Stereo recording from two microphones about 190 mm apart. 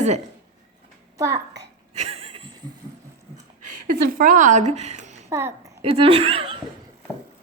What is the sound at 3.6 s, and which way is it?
Speech, 45° right (ahead or behind).